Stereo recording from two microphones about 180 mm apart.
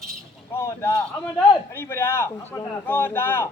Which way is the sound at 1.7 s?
10° left (ahead or behind).